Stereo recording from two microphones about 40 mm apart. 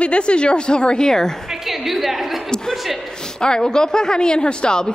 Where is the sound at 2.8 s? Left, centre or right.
Centre.